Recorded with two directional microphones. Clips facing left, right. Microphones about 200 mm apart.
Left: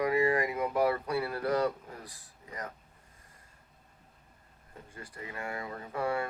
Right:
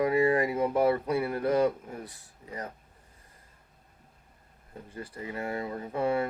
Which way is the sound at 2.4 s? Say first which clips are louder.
Right 3 dB; 30° right (ahead or behind).